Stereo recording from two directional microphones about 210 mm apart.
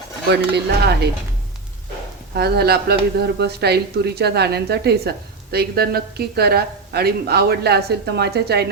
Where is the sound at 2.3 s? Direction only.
50° right (ahead or behind).